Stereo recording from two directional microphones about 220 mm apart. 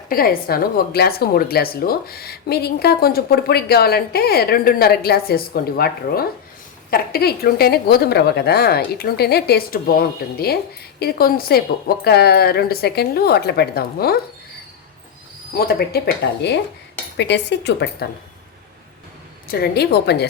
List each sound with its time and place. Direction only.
0.1 s a woman's voice: 45° left (ahead or behind)
15.5 s a woman's voice: 45° left (ahead or behind)
19.5 s a woman's voice: 45° left (ahead or behind)